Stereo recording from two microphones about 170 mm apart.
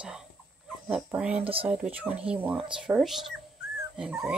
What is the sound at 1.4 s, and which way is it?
Speech, 35° right (ahead or behind).